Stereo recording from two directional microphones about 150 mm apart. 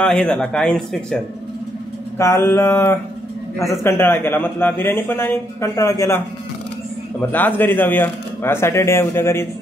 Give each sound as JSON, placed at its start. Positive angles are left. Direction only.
{"t": 0.0, "sound": "speech", "side_deg": 5}
{"t": 2.1, "sound": "a man's voice", "side_deg": 20}